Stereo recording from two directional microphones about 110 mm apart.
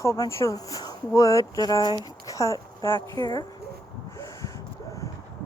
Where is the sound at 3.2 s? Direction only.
40° left (ahead or behind).